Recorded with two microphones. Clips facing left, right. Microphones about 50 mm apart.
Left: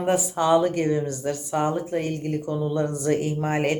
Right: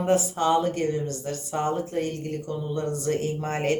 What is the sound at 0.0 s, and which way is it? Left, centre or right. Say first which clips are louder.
Speech: even; left.